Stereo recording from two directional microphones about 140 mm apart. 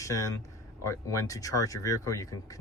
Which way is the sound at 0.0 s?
20° left (ahead or behind).